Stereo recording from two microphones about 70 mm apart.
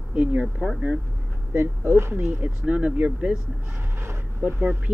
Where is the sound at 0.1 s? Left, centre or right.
Right.